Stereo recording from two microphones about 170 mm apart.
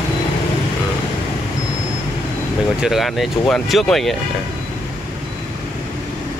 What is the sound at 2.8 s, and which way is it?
Speech, centre (ahead or behind).